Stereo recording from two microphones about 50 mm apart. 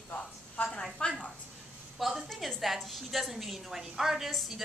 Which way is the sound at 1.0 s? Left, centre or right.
Centre.